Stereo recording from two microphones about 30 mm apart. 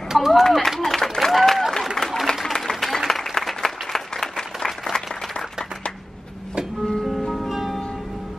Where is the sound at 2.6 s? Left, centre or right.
Centre.